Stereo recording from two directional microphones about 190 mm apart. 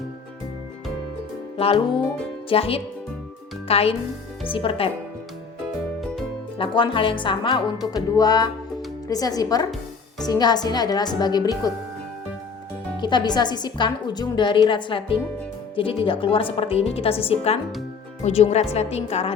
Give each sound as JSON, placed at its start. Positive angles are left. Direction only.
{"t": 1.5, "sound": "a woman's voice", "side_deg": 30}
{"t": 6.6, "sound": "a woman's voice", "side_deg": 25}
{"t": 13.0, "sound": "a woman's voice", "side_deg": 25}